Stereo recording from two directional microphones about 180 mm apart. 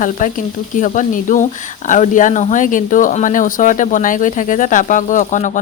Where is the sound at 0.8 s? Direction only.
45° left (ahead or behind).